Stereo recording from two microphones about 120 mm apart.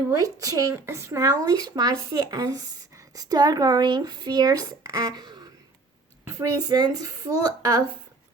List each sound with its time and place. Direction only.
0.1 s speech: 30° right (ahead or behind)
6.7 s speech: 35° right (ahead or behind)